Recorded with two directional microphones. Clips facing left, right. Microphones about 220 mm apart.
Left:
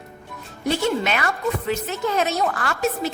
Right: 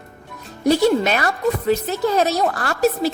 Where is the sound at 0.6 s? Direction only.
40° right (ahead or behind).